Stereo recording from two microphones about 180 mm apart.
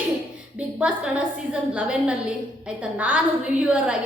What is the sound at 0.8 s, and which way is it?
A woman's voice, 5° right (ahead or behind).